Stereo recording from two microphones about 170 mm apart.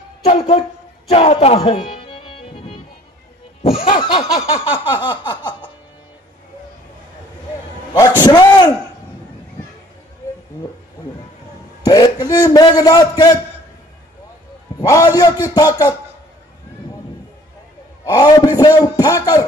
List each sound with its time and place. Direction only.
0.2 s music: 35° left (ahead or behind)
3.8 s a sound: 30° left (ahead or behind)
7.9 s music: 25° left (ahead or behind)
11.8 s a man's voice: 25° left (ahead or behind)
14.8 s a man's voice: 20° left (ahead or behind)
18.0 s a sound: 25° left (ahead or behind)
18.6 s a man's voice: 20° left (ahead or behind)